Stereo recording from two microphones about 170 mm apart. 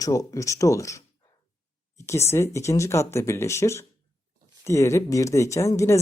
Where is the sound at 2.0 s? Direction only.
15° left (ahead or behind).